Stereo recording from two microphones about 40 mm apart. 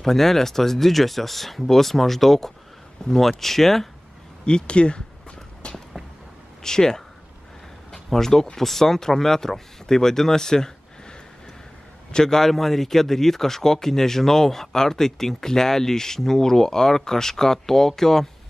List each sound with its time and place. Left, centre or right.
0.0 s a man's voice: centre
4.5 s speech: left
5.6 s a sound: left
6.6 s a man's voice: centre
7.9 s a sound: centre
8.5 s a man's voice: centre